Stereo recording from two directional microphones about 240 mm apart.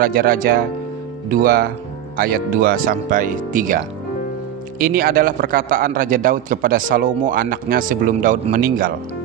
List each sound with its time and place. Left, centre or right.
0.0 s a man's voice: right